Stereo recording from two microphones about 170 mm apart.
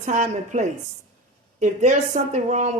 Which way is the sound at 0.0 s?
45° right (ahead or behind).